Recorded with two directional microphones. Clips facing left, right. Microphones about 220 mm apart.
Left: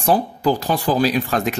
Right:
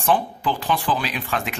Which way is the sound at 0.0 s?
40° left (ahead or behind).